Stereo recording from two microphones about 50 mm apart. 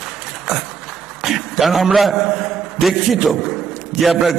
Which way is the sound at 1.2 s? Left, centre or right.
Centre.